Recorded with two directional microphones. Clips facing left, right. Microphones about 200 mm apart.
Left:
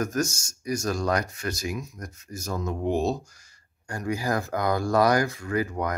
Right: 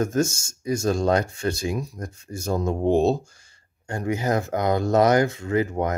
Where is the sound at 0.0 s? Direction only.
25° right (ahead or behind).